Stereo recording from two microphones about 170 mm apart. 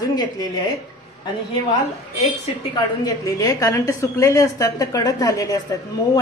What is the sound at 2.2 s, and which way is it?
Speech, 35° left (ahead or behind).